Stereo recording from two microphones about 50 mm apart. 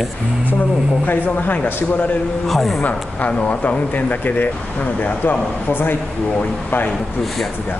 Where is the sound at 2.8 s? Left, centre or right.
Left.